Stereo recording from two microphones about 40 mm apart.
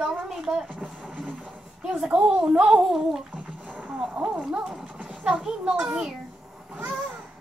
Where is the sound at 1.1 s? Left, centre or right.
Right.